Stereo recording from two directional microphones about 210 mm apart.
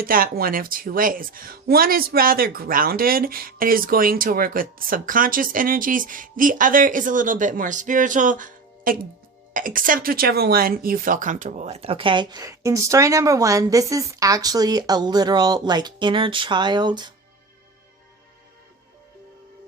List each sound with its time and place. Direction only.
0.0 s speech: 45° right (ahead or behind); by 17.1 s 20° right (ahead or behind)